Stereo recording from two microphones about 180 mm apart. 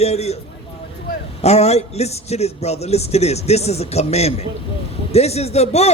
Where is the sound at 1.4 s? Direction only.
35° left (ahead or behind).